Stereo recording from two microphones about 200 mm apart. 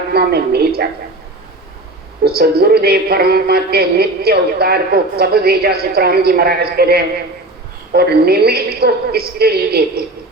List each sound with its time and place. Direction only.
0.1 s a man's voice: 50° right (ahead or behind)
2.2 s a man's voice: 50° right (ahead or behind)